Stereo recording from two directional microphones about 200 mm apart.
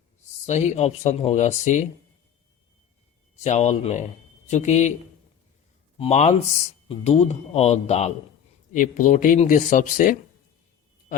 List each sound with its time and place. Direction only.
0.4 s speech: 35° left (ahead or behind)
3.4 s speech: 35° left (ahead or behind)
6.0 s speech: 35° left (ahead or behind)